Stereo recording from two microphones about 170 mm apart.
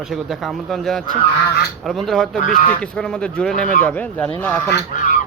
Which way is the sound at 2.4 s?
50° left (ahead or behind).